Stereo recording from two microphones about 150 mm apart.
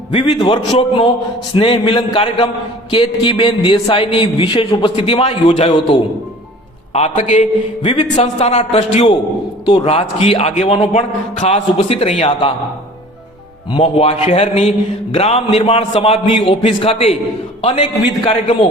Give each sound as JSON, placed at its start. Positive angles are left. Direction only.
{"t": 0.1, "sound": "a man's voice", "side_deg": 45}
{"t": 6.9, "sound": "a man's voice", "side_deg": 50}
{"t": 7.8, "sound": "a man's voice", "side_deg": 35}
{"t": 8.1, "sound": "a man's voice", "side_deg": 45}
{"t": 13.7, "sound": "a man's voice", "side_deg": 35}